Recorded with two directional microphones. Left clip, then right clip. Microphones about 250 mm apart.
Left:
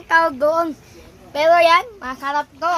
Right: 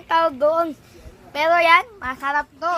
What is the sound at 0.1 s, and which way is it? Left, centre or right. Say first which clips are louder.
A child's voice: left 2 dB; centre.